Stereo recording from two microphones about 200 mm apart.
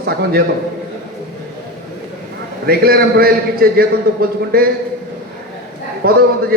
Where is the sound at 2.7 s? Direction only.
50° right (ahead or behind).